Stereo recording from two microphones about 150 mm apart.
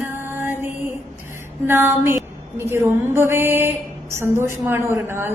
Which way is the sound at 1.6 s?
15° right (ahead or behind).